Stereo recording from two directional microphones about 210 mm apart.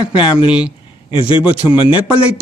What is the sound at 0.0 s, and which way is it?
Speech, 25° left (ahead or behind).